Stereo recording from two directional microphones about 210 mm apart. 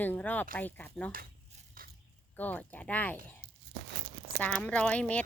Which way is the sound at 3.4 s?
25° right (ahead or behind).